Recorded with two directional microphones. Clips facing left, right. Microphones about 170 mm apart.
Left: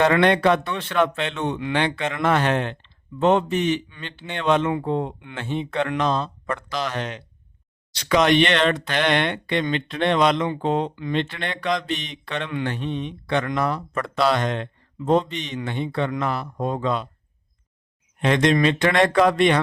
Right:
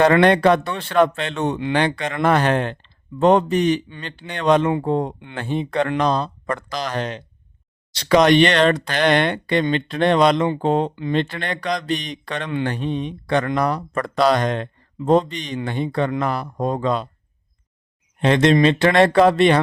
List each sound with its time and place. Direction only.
0.0 s speech: 40° right (ahead or behind)
11.1 s speech: 40° right (ahead or behind)
18.2 s speech: 30° right (ahead or behind)